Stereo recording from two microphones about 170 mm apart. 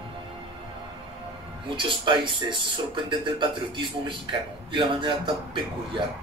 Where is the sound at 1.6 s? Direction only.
30° right (ahead or behind).